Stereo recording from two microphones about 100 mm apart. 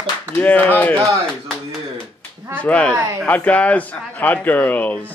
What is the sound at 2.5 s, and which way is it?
Speech, 15° left (ahead or behind).